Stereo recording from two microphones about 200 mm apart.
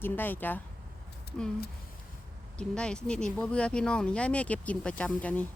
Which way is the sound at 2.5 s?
5° left (ahead or behind).